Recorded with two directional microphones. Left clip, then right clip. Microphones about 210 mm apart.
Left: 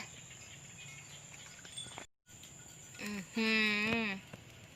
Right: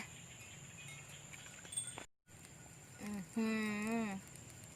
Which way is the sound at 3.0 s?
5° left (ahead or behind).